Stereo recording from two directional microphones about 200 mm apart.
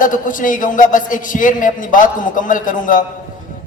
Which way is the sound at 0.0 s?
40° left (ahead or behind).